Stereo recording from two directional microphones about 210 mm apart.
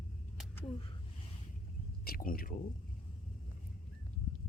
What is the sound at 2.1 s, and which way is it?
Speech, 45° left (ahead or behind).